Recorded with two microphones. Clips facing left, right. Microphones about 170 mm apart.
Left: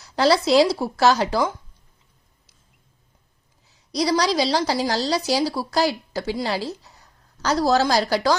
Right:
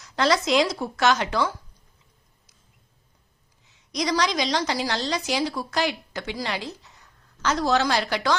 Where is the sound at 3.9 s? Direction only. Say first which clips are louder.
Left 4 dB; 35° left (ahead or behind).